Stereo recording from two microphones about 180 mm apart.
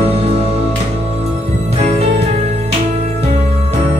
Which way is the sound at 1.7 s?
35° right (ahead or behind).